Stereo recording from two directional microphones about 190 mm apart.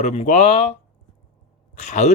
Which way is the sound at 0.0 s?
35° left (ahead or behind).